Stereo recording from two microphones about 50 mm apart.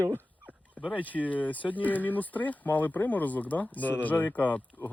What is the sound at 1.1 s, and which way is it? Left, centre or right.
Speech, left.